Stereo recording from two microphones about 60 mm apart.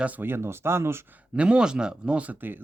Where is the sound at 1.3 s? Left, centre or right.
Centre.